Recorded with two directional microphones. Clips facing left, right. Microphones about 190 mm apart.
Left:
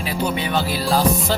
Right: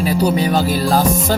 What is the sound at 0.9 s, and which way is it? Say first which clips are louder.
Music: even; 45° right (ahead or behind).